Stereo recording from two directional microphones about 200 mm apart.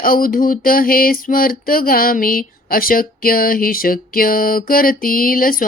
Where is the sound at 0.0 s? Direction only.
45° left (ahead or behind).